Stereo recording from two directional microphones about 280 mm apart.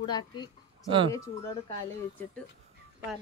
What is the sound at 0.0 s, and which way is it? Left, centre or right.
Speech, centre.